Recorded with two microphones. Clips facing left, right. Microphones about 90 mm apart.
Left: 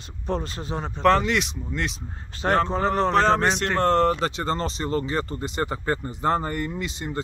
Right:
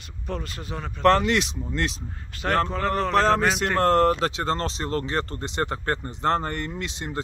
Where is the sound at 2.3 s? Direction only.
30° left (ahead or behind).